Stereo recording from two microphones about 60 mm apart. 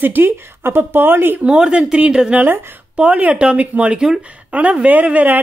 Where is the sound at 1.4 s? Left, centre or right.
Centre.